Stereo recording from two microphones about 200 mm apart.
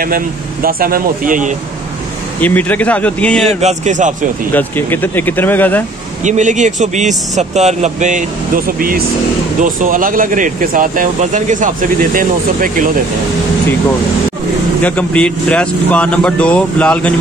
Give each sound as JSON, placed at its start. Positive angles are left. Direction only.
{"t": 0.0, "sound": "speech", "side_deg": -45}
{"t": 2.4, "sound": "speech", "side_deg": 10}
{"t": 3.4, "sound": "speech", "side_deg": -35}
{"t": 4.6, "sound": "speech", "side_deg": 10}
{"t": 6.2, "sound": "speech", "side_deg": -35}
{"t": 14.8, "sound": "speech", "side_deg": 5}